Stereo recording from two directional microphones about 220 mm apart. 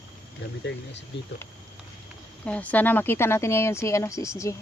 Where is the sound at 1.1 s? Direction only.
55° left (ahead or behind).